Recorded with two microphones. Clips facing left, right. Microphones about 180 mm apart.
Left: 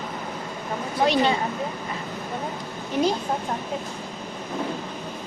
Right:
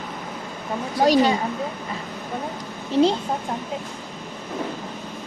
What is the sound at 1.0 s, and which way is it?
Speech, 40° right (ahead or behind).